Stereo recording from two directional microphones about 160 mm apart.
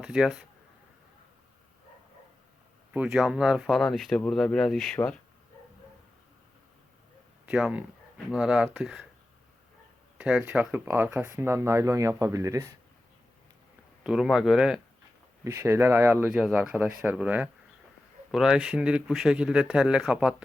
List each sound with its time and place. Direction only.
0.0 s speech: 5° right (ahead or behind)
2.9 s speech: 5° right (ahead or behind)
7.4 s speech: 5° right (ahead or behind)
10.2 s speech: 5° right (ahead or behind)
14.0 s speech: 5° right (ahead or behind)
15.4 s speech: 15° right (ahead or behind)